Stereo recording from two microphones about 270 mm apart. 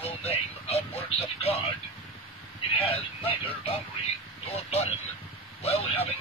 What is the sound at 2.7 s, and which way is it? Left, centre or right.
Speech, left.